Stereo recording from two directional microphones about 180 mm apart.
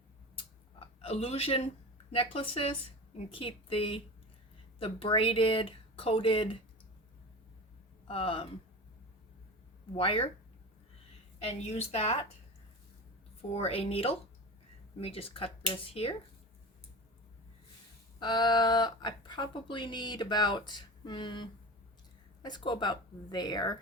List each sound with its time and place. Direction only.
0.3 s a sound: 30° left (ahead or behind)
3.2 s speech: 30° left (ahead or behind)
8.0 s speech: 30° left (ahead or behind)
9.9 s speech: 30° left (ahead or behind)
11.3 s speech: 35° left (ahead or behind)
13.5 s speech: 35° left (ahead or behind)
18.2 s speech: 25° left (ahead or behind)